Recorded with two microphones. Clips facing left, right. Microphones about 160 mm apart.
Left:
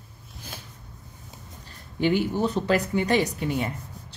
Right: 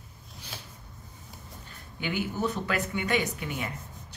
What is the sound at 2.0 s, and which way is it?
Speech, 30° left (ahead or behind).